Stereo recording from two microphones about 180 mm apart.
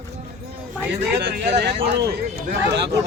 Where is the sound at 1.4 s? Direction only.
70° right (ahead or behind).